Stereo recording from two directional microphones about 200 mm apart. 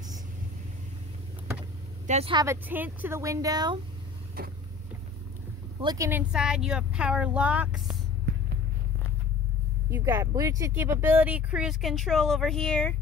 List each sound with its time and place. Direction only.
2.0 s speech: 30° right (ahead or behind)
2.4 s speech: 10° right (ahead or behind)
4.4 s vehicle: 45° right (ahead or behind)
5.8 s speech: 20° right (ahead or behind)
9.8 s speech: 10° right (ahead or behind); by 12.9 s 5° left (ahead or behind)